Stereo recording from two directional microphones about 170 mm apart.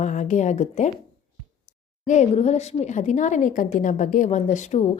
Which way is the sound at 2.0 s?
45° left (ahead or behind).